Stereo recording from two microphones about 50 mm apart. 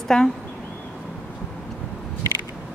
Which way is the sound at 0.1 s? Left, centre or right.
Left.